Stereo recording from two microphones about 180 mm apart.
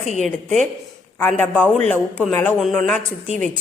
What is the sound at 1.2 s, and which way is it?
A man's voice, 10° left (ahead or behind).